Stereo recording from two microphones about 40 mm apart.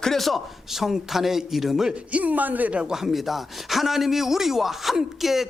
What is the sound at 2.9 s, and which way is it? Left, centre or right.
Speech, centre.